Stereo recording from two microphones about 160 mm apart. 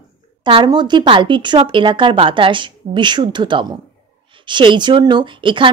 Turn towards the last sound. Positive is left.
turn(degrees=-30)  # may be behind; listen again after turning